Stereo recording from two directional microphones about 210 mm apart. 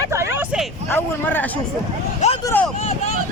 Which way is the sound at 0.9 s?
10° left (ahead or behind).